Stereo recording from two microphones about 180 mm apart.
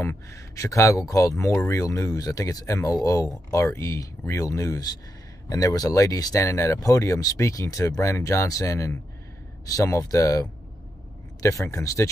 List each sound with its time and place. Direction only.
0.0 s speech: 15° left (ahead or behind)